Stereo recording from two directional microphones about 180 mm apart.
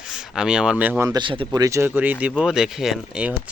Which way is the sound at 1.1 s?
25° right (ahead or behind).